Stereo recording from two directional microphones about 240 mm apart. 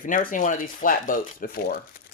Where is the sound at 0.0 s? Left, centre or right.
Left.